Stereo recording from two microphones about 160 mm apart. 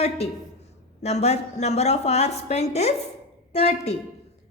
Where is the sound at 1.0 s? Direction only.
45° left (ahead or behind).